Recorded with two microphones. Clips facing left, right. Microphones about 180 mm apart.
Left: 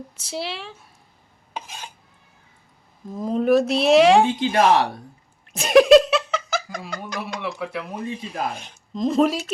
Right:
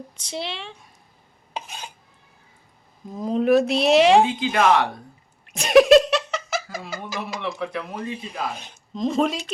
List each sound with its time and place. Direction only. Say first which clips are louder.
0.2 s speech: left 1 dB; 5° left (ahead or behind)
3.1 s speech: even; centre (ahead or behind)
4.4 s speech: left 1 dB; 35° left (ahead or behind)
5.5 s laughter: left 1 dB; centre (ahead or behind)
7.0 s speech: even; centre (ahead or behind)